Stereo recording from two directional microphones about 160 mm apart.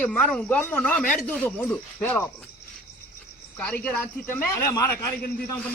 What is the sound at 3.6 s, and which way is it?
A man's voice, 10° left (ahead or behind).